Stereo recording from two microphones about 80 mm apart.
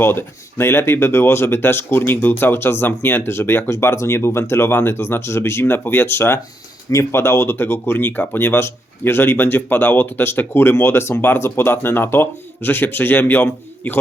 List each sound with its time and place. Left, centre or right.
0.0 s speech: left